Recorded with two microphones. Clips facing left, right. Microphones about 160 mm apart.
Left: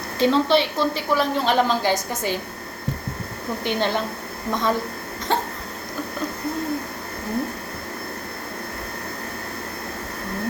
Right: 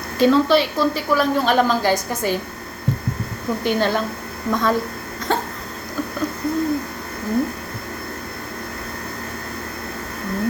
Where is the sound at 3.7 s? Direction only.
20° left (ahead or behind).